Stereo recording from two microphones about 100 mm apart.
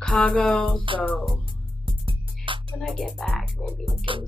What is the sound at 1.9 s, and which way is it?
Music, 60° right (ahead or behind).